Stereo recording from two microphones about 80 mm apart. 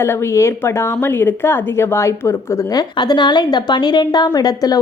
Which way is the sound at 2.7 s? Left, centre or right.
Left.